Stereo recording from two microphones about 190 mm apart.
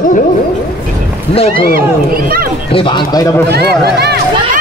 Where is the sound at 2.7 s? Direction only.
25° left (ahead or behind).